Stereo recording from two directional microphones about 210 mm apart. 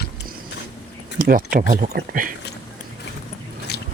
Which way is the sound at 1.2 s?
45° right (ahead or behind).